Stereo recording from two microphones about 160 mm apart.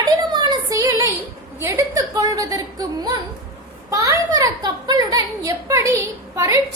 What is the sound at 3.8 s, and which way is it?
A child's voice, 20° right (ahead or behind).